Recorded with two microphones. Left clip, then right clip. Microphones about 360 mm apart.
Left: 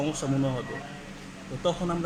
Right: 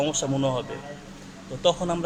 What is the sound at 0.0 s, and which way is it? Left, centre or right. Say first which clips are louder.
Speech: right 4 dB; right.